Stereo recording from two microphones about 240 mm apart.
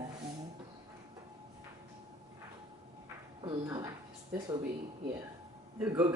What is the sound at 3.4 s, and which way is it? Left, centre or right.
Speech, centre.